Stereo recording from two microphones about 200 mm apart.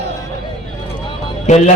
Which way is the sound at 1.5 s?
35° left (ahead or behind).